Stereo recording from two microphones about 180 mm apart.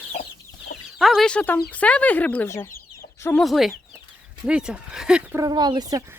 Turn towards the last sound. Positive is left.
turn(degrees=-25)  # may be behind; listen again after turning